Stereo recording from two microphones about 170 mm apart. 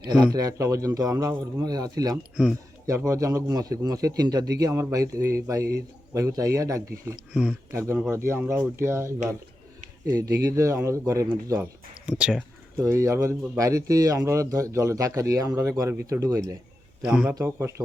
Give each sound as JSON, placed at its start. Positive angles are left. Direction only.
{"t": 0.1, "sound": "a man's voice", "side_deg": -25}
{"t": 2.3, "sound": "speech", "side_deg": -5}
{"t": 2.8, "sound": "a man's voice", "side_deg": -20}
{"t": 12.0, "sound": "speech", "side_deg": -5}
{"t": 12.8, "sound": "a man's voice", "side_deg": -15}
{"t": 17.0, "sound": "speech", "side_deg": -10}